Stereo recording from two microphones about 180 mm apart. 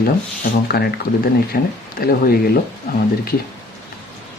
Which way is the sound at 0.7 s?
60° left (ahead or behind).